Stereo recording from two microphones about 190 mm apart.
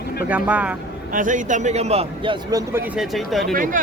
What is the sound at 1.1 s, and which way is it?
A man's voice, 45° right (ahead or behind).